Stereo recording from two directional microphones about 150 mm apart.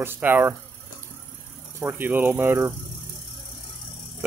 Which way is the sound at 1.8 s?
15° right (ahead or behind).